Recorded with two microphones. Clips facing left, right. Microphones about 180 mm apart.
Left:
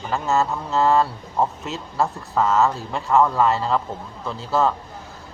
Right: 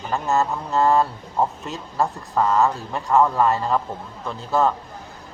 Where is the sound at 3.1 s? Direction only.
Centre (ahead or behind).